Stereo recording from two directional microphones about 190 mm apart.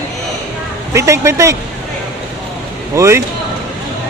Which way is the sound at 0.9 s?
15° right (ahead or behind).